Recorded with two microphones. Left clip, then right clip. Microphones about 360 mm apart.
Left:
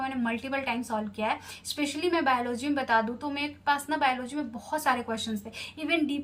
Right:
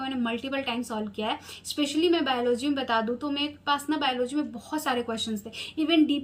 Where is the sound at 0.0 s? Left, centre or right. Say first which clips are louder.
Right 1 dB; left.